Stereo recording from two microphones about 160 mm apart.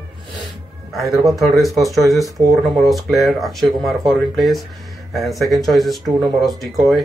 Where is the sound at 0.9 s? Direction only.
Centre (ahead or behind).